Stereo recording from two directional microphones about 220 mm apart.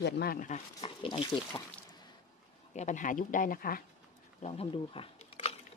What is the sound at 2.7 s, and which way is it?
Speech, 35° left (ahead or behind).